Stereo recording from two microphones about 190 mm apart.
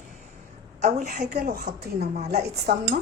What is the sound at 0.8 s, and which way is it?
Speech, 40° right (ahead or behind).